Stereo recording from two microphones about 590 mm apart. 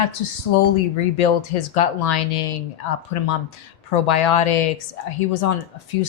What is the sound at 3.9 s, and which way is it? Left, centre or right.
Speech, left.